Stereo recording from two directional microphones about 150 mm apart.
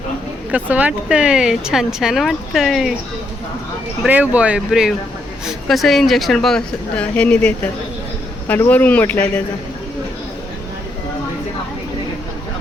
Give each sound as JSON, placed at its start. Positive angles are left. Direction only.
{"t": 0.5, "sound": "speech", "side_deg": -10}
{"t": 4.0, "sound": "speech", "side_deg": -10}